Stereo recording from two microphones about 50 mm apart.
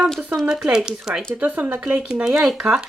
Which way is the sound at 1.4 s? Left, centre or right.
Right.